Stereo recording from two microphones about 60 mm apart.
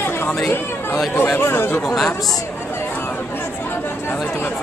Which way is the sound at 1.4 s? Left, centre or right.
Left.